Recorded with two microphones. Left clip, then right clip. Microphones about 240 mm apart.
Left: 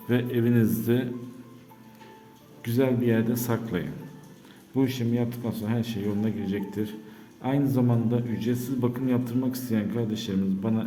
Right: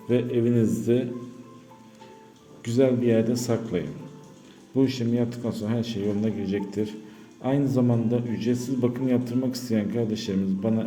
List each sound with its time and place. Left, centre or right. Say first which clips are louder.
0.1 s speech: right 2 dB; centre
2.6 s a man's voice: right 3 dB; centre